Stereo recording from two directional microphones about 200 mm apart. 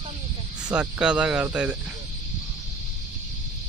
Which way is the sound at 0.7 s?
5° right (ahead or behind).